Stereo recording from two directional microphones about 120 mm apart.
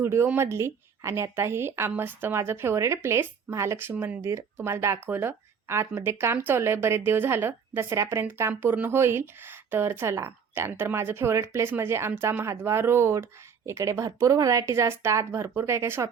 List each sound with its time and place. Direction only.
0.0 s speech: 20° right (ahead or behind)